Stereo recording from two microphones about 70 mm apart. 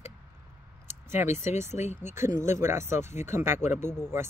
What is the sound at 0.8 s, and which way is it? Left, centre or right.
Speech, right.